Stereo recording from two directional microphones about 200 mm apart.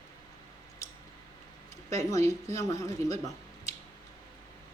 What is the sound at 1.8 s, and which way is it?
Speech, 15° left (ahead or behind).